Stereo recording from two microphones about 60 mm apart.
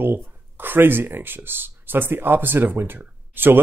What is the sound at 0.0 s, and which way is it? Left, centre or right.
Speech, right.